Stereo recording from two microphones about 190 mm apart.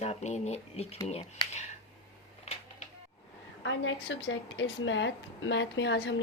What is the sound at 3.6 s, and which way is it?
A woman's voice, 75° left (ahead or behind).